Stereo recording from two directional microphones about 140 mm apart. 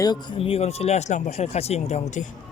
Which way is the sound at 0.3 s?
45° left (ahead or behind).